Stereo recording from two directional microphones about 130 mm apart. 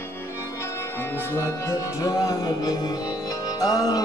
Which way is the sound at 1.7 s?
25° left (ahead or behind).